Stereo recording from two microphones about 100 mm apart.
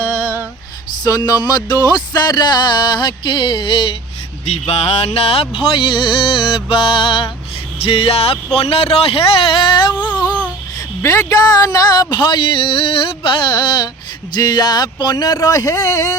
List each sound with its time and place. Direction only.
1.0 s music: 40° left (ahead or behind)
4.4 s music: 90° left; by 7.3 s 60° left (ahead or behind)
7.8 s speech: 75° left (ahead or behind); by 9.9 s 50° left (ahead or behind)
10.1 s a sound: 40° left (ahead or behind)
11.0 s music: 35° left (ahead or behind); by 13.3 s 60° left (ahead or behind)
13.5 s music: 50° left (ahead or behind)
14.3 s speech: 45° left (ahead or behind)